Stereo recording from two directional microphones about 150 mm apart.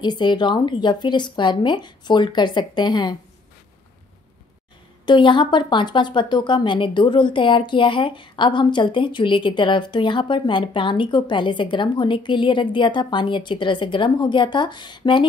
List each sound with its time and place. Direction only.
0.0 s speech: 30° left (ahead or behind)
5.0 s speech: 30° left (ahead or behind)